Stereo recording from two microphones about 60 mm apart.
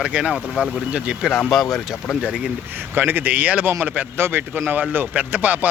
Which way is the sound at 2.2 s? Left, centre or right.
Centre.